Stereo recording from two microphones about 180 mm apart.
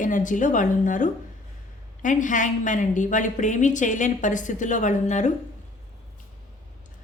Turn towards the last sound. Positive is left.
turn(degrees=40)  # may be behind; listen again after turning